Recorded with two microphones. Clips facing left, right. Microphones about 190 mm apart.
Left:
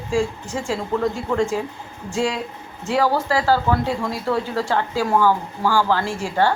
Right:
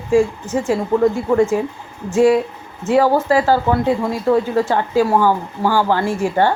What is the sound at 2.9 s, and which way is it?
Speech, 15° right (ahead or behind).